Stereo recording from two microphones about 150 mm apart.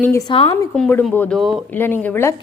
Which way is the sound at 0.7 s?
10° left (ahead or behind).